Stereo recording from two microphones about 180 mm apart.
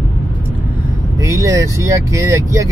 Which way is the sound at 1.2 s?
15° right (ahead or behind).